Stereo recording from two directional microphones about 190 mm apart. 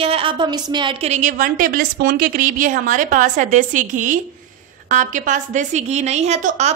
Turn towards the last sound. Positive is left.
turn(degrees=-35)  # may be behind; listen again after turning